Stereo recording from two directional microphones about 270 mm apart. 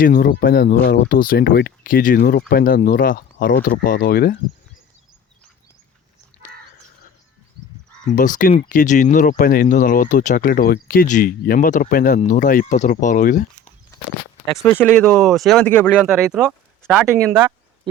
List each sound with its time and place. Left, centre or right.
0.0 s speech: left
8.0 s speech: left
14.6 s speech: centre
16.1 s speech: centre